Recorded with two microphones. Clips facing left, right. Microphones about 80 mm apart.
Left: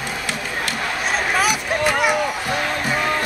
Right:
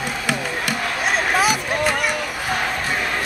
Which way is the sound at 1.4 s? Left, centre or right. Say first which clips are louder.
Even; centre.